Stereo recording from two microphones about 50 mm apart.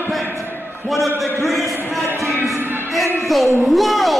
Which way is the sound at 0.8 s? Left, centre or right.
Centre.